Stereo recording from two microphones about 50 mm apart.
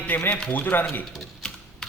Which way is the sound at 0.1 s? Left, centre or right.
Left.